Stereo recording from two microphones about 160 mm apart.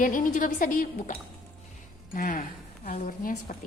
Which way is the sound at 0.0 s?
60° left (ahead or behind).